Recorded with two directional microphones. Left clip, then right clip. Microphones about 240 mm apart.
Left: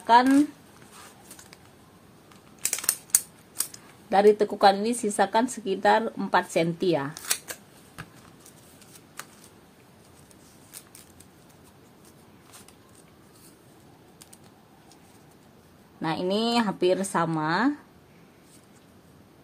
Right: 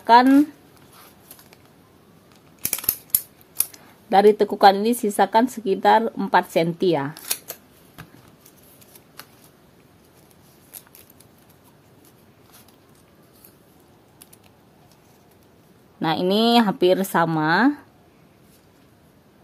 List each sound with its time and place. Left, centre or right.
0.0 s speech: right
3.7 s speech: right
16.0 s speech: right